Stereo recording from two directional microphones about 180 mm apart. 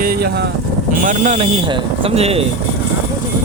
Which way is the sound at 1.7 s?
30° right (ahead or behind).